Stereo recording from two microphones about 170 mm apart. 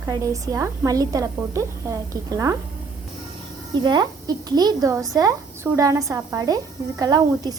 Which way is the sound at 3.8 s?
25° right (ahead or behind).